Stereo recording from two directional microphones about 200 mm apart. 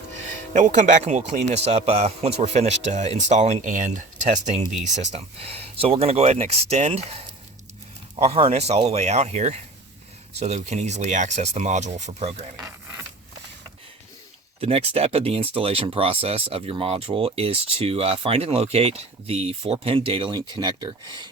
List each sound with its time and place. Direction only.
0.5 s speech: 35° right (ahead or behind)
8.2 s speech: 30° right (ahead or behind)
14.6 s speech: 30° right (ahead or behind)